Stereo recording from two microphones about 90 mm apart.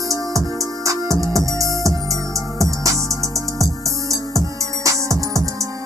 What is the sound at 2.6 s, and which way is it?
Music, 35° right (ahead or behind).